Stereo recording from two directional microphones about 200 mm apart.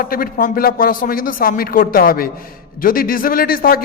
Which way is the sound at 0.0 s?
45° left (ahead or behind).